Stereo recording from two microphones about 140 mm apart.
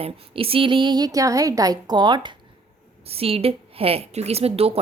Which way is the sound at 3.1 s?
45° right (ahead or behind).